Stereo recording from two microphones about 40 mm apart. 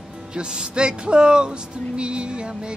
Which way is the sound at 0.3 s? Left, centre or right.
Centre.